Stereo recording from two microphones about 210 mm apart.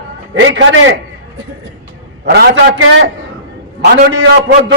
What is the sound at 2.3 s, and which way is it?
A man's voice, 50° right (ahead or behind).